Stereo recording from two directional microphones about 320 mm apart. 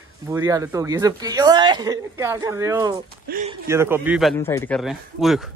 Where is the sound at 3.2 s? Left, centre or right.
Right.